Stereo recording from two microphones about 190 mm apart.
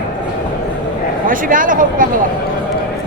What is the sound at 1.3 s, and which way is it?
Speech, 45° right (ahead or behind).